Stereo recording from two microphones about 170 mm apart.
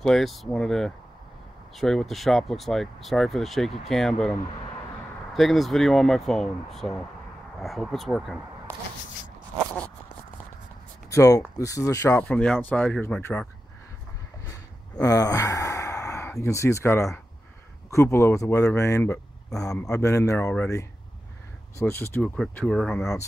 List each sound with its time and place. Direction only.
0.0 s speech: centre (ahead or behind)
11.1 s speech: 20° left (ahead or behind)
14.5 s sigh: 20° left (ahead or behind)
17.9 s speech: 15° left (ahead or behind)